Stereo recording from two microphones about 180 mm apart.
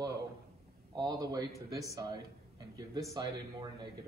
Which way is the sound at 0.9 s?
20° right (ahead or behind).